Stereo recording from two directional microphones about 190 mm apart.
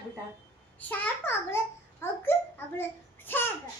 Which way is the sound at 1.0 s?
10° left (ahead or behind).